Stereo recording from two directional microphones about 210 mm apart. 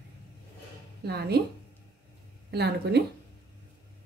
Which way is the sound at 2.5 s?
50° right (ahead or behind).